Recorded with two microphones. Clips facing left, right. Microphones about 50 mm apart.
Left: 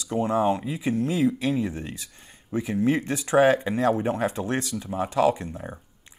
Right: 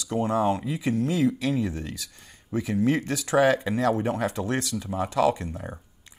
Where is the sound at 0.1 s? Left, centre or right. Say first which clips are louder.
Left 1 dB; left.